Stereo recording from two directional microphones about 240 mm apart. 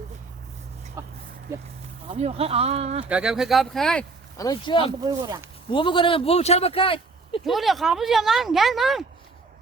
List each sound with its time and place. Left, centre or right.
1.0 s speech: centre
2.1 s speech: right
3.1 s speech: centre
4.4 s speech: centre
4.9 s speech: centre
5.7 s speech: left
7.4 s speech: centre